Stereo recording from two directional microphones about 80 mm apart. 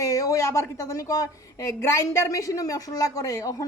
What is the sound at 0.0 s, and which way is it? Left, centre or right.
A woman's voice, left.